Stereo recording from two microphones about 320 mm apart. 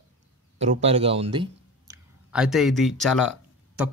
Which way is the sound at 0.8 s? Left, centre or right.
Centre.